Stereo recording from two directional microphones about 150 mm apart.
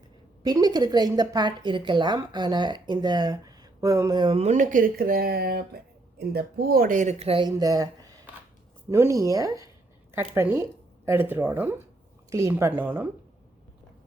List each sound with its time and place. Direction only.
0.4 s a woman's voice: 25° right (ahead or behind)